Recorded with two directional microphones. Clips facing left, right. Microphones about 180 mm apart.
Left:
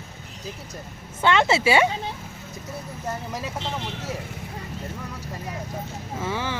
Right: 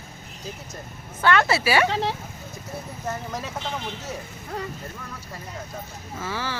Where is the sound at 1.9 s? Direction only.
85° right.